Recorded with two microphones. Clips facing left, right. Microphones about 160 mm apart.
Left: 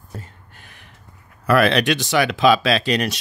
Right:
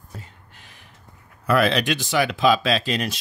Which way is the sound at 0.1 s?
50° left (ahead or behind).